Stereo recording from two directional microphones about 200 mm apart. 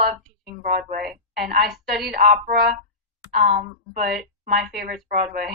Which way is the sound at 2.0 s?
45° right (ahead or behind).